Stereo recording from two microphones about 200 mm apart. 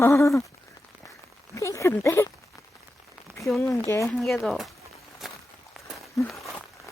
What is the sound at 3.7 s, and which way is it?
Speech, 15° left (ahead or behind).